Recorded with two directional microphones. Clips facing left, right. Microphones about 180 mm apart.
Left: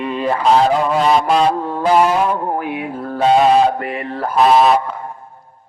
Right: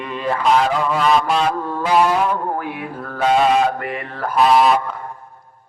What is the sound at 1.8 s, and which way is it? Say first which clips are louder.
Mantra: left 2 dB; 35° left (ahead or behind).